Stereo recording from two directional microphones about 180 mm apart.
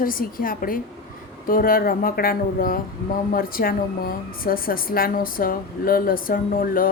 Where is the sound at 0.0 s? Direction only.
50° left (ahead or behind).